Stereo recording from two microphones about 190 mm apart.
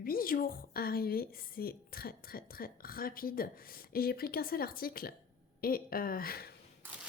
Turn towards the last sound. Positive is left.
turn(degrees=50)  # may be behind; listen again after turning